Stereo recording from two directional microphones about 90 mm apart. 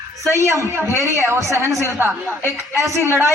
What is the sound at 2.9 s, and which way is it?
Speech, 35° left (ahead or behind).